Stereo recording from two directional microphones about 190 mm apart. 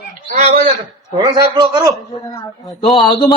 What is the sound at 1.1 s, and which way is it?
Speech, 20° right (ahead or behind).